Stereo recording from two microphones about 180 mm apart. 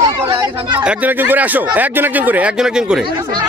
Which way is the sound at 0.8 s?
5° right (ahead or behind).